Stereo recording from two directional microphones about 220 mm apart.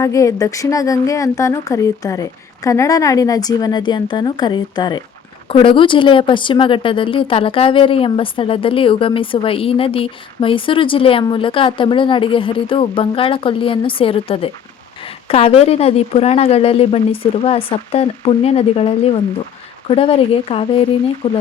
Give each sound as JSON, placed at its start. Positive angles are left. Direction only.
{"t": 0.0, "sound": "a woman's voice", "side_deg": 15}